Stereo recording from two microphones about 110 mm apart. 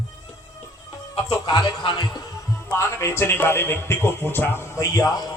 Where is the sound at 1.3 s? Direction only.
40° left (ahead or behind).